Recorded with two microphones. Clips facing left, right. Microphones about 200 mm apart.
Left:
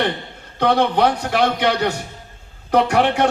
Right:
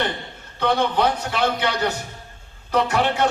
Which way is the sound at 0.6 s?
65° left (ahead or behind).